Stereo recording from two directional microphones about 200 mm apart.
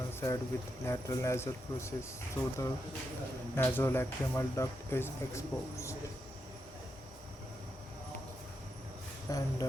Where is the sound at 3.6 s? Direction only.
10° left (ahead or behind).